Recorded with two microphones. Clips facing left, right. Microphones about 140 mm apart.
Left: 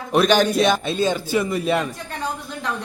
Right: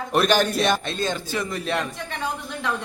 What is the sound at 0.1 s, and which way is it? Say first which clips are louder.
A man's voice: left 4 dB; centre (ahead or behind).